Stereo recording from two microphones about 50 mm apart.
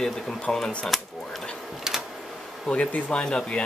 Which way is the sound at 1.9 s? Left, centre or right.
Centre.